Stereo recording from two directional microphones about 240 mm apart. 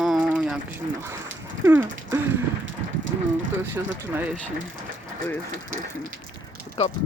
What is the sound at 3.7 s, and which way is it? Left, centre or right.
Speech, centre.